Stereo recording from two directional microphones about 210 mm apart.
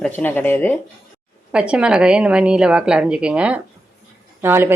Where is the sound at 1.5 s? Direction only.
5° right (ahead or behind).